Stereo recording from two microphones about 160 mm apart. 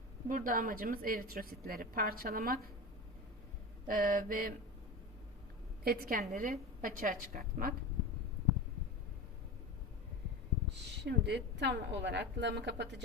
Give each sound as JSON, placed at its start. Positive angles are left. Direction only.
{"t": 0.3, "sound": "speech", "side_deg": -60}
{"t": 3.8, "sound": "speech", "side_deg": -60}
{"t": 5.8, "sound": "speech", "side_deg": -70}
{"t": 11.0, "sound": "a woman's voice", "side_deg": -90}